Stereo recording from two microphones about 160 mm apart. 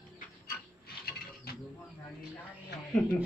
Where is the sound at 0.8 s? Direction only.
75° left (ahead or behind).